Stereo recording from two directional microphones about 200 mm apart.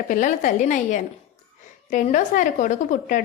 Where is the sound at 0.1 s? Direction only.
40° left (ahead or behind).